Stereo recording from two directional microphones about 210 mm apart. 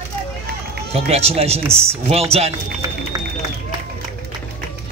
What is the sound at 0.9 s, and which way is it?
Speech, 30° right (ahead or behind).